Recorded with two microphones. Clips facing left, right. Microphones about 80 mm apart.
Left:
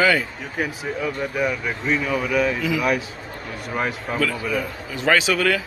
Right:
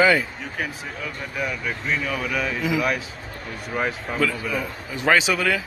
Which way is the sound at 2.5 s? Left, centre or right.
Right.